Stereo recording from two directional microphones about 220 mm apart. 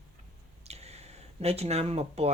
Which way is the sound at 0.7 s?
30° right (ahead or behind).